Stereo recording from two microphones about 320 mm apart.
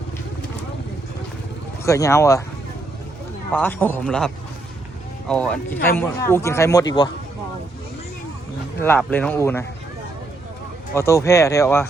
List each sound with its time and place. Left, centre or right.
1.8 s speech: centre
3.5 s a man's voice: centre
5.3 s speech: centre
8.8 s speech: centre
10.9 s speech: centre